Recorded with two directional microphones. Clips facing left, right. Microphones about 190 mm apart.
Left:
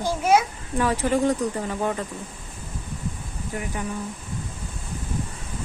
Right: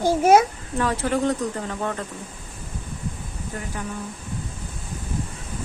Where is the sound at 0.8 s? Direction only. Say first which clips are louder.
Left 1 dB; 10° left (ahead or behind).